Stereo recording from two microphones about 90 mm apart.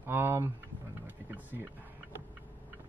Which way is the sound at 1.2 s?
25° right (ahead or behind).